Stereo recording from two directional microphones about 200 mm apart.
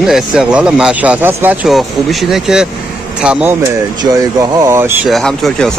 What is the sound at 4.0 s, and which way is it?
Speech, 20° right (ahead or behind).